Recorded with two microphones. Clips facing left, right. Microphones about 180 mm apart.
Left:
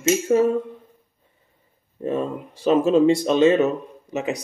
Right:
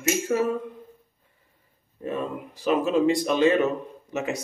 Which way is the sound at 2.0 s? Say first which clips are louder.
Left 5 dB; 30° left (ahead or behind).